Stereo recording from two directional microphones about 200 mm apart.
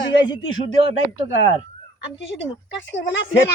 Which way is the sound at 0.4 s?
85° left.